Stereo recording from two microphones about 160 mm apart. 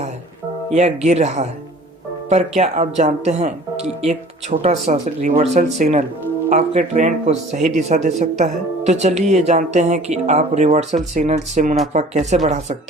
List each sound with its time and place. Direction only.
0.7 s speech: 45° right (ahead or behind)
2.6 s speech: 45° right (ahead or behind)